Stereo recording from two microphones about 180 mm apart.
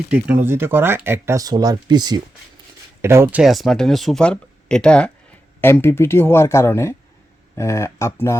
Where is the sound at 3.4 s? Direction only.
Centre (ahead or behind).